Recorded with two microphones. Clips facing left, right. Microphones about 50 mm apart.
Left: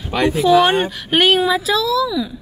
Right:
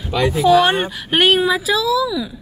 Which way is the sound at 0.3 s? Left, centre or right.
Centre.